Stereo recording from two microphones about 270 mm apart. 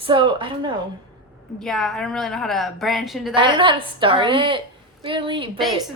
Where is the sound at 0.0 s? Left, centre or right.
Centre.